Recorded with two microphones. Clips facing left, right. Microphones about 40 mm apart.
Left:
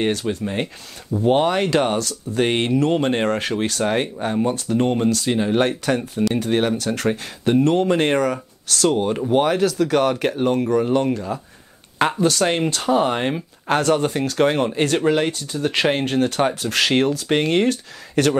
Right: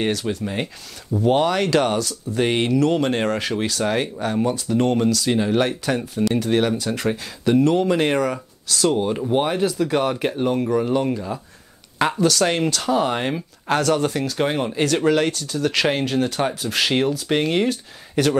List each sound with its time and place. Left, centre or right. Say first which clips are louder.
0.0 s speech: left 1 dB; left
2.0 s speech: left 1 dB; left
4.5 s speech: left 1 dB; left
4.7 s speech: even; left
5.6 s speech: left 2 dB; left
6.8 s speech: left 1 dB; left
7.1 s speech: even; left
12.0 s speech: even; left
14.2 s speech: left 4 dB; left
15.0 s speech: right 2 dB; left